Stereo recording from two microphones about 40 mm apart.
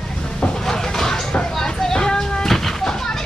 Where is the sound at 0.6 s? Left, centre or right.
Centre.